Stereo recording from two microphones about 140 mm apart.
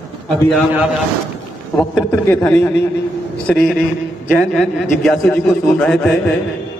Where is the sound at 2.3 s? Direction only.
15° left (ahead or behind).